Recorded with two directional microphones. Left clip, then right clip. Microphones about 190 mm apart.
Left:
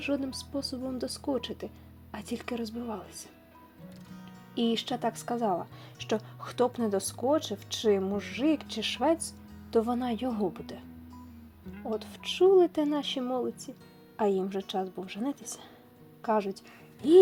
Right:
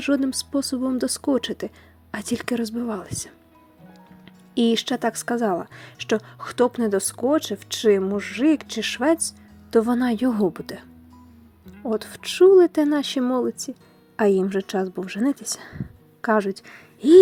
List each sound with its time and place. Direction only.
0.0 s speech: 35° right (ahead or behind)
4.5 s speech: 30° right (ahead or behind)
11.9 s speech: 30° right (ahead or behind)